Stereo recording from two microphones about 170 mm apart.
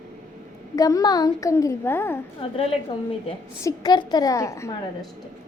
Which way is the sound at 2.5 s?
35° left (ahead or behind).